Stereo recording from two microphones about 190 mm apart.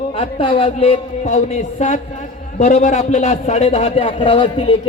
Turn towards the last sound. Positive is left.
turn(degrees=30)  # may be behind; listen again after turning